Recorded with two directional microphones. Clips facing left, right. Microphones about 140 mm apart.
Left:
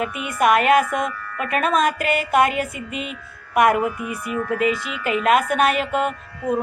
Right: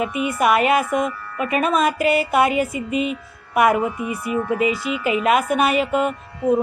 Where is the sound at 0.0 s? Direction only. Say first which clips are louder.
Right 1 dB; 5° right (ahead or behind).